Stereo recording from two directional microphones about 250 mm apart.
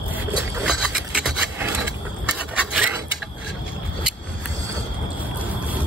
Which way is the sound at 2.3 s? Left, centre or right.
Centre.